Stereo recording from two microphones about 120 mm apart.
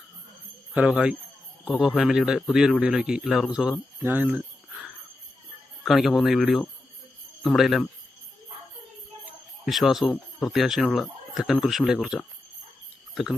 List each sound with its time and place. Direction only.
0.7 s speech: 10° right (ahead or behind)
4.0 s speech: 15° right (ahead or behind)
5.8 s speech: centre (ahead or behind)
9.6 s speech: centre (ahead or behind)